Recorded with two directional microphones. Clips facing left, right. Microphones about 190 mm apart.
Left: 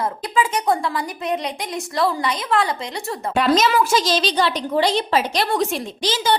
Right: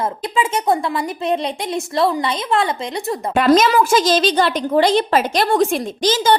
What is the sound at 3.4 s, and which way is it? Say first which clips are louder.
A woman's voice: right 4 dB; 50° right (ahead or behind).